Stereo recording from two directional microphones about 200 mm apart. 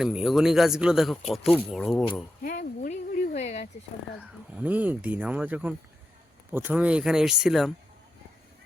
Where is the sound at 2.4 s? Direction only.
45° left (ahead or behind).